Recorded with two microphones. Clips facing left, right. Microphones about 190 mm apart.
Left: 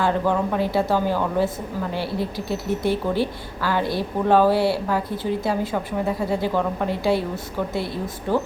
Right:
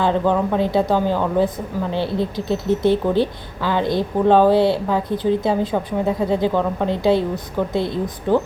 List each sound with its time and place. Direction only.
0.0 s speech: 20° right (ahead or behind)